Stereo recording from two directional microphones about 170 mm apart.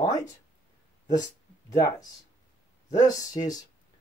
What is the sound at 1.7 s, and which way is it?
Speech, 20° left (ahead or behind).